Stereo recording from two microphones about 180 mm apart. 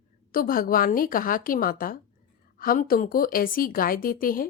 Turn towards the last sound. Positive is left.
turn(degrees=50)  # may be behind; listen again after turning